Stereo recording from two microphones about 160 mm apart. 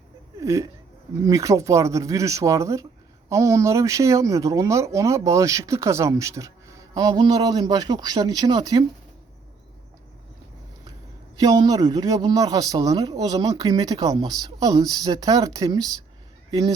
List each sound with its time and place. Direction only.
0.3 s a sound: 20° right (ahead or behind)
1.2 s speech: 20° right (ahead or behind)
11.3 s speech: 25° right (ahead or behind)